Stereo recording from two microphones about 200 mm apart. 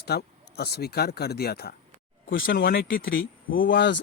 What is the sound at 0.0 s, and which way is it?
Speech, 50° left (ahead or behind).